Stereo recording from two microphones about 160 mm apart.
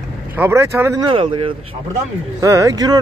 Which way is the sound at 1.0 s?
30° right (ahead or behind).